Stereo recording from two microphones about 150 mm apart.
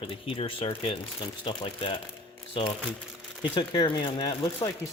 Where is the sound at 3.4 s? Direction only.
30° left (ahead or behind).